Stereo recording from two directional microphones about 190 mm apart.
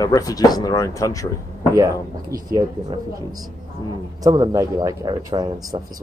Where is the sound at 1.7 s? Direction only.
20° right (ahead or behind).